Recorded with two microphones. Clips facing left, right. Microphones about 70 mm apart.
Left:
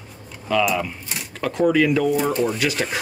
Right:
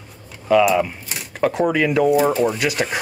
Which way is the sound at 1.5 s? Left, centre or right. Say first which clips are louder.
Left 2 dB; centre.